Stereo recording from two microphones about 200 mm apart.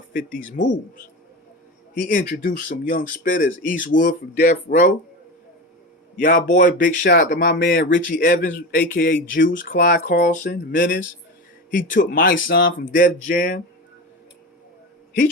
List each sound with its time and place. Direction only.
0.1 s speech: 45° left (ahead or behind)
2.0 s speech: 40° left (ahead or behind)
6.1 s speech: 40° left (ahead or behind)
7.0 s a sound: 50° left (ahead or behind)